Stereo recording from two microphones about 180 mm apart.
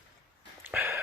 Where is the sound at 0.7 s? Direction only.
10° right (ahead or behind).